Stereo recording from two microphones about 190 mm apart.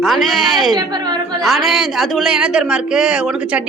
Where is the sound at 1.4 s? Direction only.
Centre (ahead or behind).